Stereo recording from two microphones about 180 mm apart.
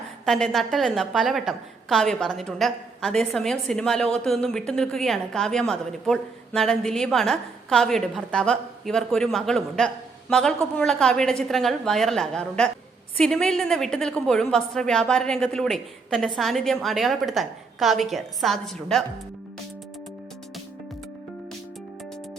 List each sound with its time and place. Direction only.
0.3 s a woman's voice: 5° left (ahead or behind)